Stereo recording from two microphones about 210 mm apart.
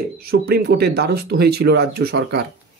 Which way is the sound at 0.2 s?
50° right (ahead or behind).